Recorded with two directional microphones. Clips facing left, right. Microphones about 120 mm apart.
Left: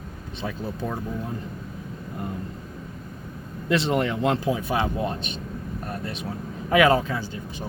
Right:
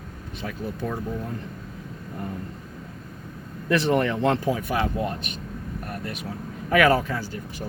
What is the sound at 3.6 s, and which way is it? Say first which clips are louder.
Speech: right 1 dB; 20° left (ahead or behind).